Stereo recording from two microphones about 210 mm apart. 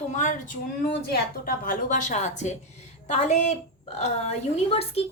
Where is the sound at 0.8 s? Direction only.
50° left (ahead or behind); by 5.0 s 30° left (ahead or behind).